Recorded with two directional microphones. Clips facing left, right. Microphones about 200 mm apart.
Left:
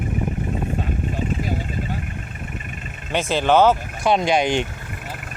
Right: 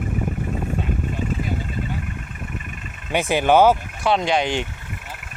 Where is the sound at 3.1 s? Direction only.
15° right (ahead or behind).